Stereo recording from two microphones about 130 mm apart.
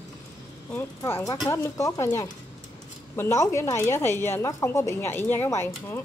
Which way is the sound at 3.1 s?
20° left (ahead or behind).